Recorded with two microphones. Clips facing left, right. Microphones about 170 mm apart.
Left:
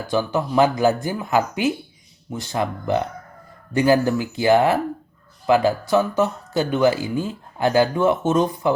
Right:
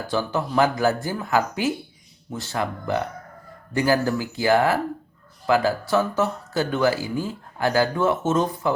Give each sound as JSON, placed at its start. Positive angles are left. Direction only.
{"t": 0.1, "sound": "speech", "side_deg": 15}